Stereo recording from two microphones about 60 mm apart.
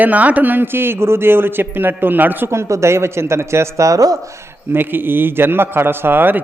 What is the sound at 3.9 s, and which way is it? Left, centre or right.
Speech, right.